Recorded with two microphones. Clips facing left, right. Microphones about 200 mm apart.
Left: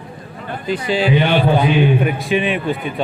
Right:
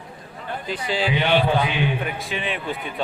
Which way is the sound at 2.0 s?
15° left (ahead or behind).